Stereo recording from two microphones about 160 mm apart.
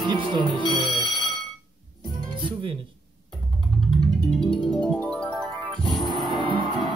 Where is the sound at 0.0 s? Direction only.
30° right (ahead or behind).